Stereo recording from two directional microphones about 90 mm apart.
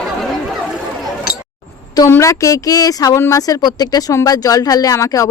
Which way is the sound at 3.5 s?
50° left (ahead or behind).